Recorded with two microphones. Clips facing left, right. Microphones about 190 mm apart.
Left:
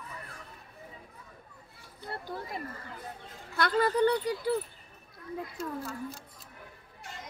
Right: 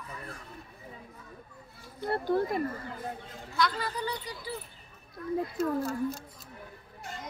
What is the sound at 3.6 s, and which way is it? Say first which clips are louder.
Speech: left 5 dB; 55° left (ahead or behind).